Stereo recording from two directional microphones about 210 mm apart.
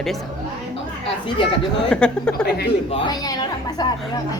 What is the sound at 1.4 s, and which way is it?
Speech, 25° left (ahead or behind).